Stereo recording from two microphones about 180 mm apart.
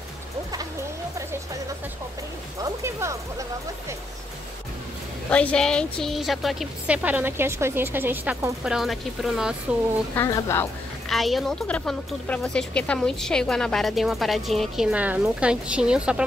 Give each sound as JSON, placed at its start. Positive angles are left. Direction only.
{"t": 2.6, "sound": "music", "side_deg": -15}
{"t": 5.3, "sound": "a woman's voice", "side_deg": 5}
{"t": 10.1, "sound": "speech", "side_deg": 15}
{"t": 11.1, "sound": "a woman's voice", "side_deg": 0}